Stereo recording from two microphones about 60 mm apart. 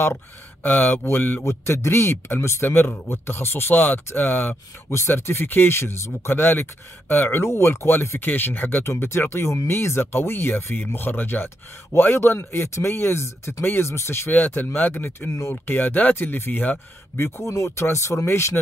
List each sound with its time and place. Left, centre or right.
0.7 s speech: left
1.4 s speech: left
7.4 s speech: left
14.3 s speech: left
17.5 s speech: left